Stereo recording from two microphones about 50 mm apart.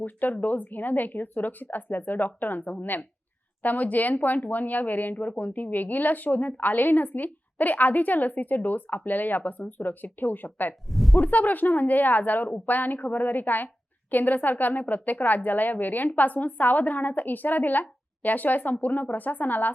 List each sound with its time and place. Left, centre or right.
0.0 s a woman's voice: left
10.8 s speech: centre
11.3 s a woman's voice: left